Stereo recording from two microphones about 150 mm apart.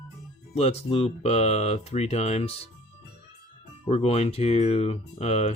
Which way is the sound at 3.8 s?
45° left (ahead or behind).